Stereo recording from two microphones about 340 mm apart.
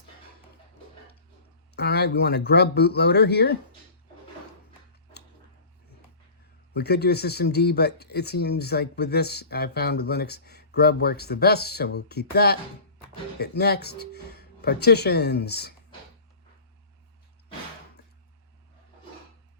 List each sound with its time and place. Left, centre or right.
1.7 s speech: left
6.7 s speech: left